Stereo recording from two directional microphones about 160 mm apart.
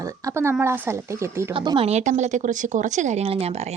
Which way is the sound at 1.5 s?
30° right (ahead or behind).